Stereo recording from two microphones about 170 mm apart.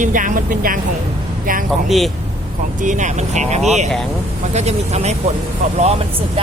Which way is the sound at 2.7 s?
45° right (ahead or behind).